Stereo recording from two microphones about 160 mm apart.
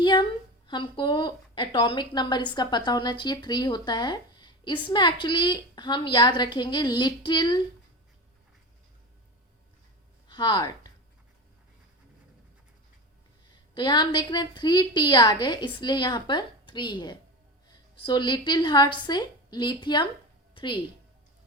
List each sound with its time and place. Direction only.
0.0 s a woman's voice: 30° left (ahead or behind)
10.2 s speech: 30° left (ahead or behind)
13.7 s a woman's voice: 25° left (ahead or behind)